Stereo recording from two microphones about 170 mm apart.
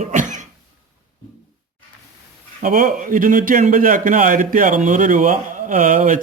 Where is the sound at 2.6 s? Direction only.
50° right (ahead or behind).